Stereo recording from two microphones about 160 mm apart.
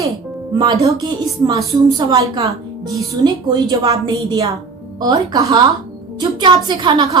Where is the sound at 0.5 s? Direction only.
25° right (ahead or behind).